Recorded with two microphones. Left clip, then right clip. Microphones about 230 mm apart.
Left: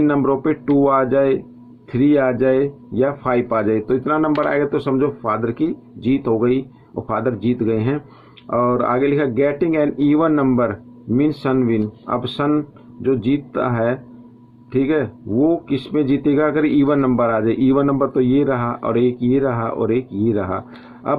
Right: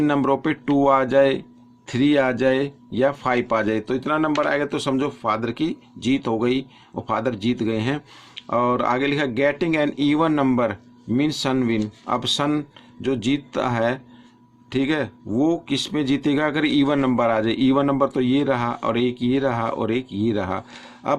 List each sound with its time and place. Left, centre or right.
0.0 s speech: right